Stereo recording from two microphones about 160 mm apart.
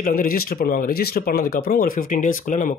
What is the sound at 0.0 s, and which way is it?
Speech, 65° left (ahead or behind).